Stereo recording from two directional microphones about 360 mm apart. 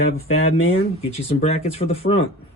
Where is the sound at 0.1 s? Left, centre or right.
Centre.